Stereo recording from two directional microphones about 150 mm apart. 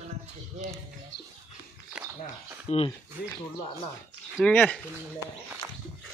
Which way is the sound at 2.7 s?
45° left (ahead or behind).